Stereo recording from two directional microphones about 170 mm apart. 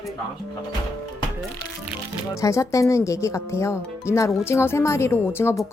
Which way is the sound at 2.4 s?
20° left (ahead or behind).